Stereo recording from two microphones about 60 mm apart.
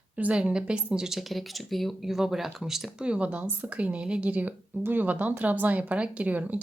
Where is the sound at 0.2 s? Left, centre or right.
Right; by 3.1 s centre.